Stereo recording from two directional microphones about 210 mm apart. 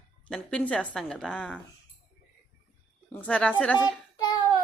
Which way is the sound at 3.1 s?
5° left (ahead or behind).